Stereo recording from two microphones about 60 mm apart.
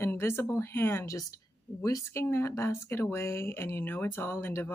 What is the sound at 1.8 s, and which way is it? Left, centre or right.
A woman's voice, left.